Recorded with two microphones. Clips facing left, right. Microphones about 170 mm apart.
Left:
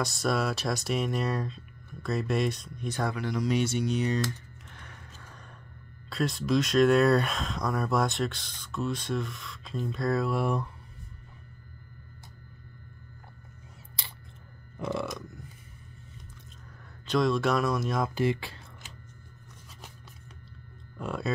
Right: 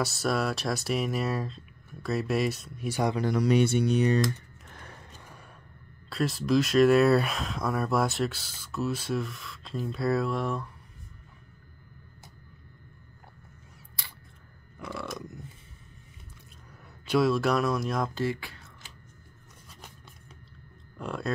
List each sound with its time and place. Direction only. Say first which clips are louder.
0.0 s speech: even; centre (ahead or behind)
3.3 s speech: right 4 dB; 60° right (ahead or behind)
4.6 s music: right 4 dB; 40° right (ahead or behind)
6.0 s speech: right 1 dB; centre (ahead or behind)
14.8 s a sound: left 6 dB; 25° left (ahead or behind)
17.0 s speech: right 1 dB; 5° right (ahead or behind)
18.1 s speech: left 3 dB; 20° left (ahead or behind)
21.0 s speech: left 1 dB; centre (ahead or behind)